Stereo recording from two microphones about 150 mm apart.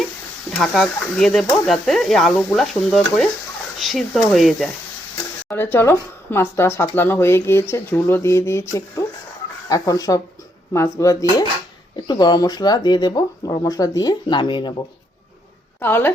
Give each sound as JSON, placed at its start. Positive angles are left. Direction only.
{"t": 0.5, "sound": "speech", "side_deg": 0}
{"t": 5.5, "sound": "speech", "side_deg": 15}
{"t": 15.8, "sound": "speech", "side_deg": 15}